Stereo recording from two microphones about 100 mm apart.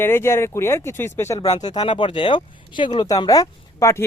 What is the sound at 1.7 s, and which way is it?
A man's voice, 70° left (ahead or behind).